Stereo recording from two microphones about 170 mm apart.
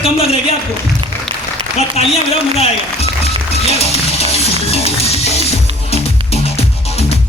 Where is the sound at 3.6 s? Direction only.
35° left (ahead or behind).